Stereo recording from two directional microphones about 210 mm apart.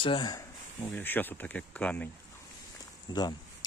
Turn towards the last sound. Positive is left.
turn(degrees=20)  # may be behind; listen again after turning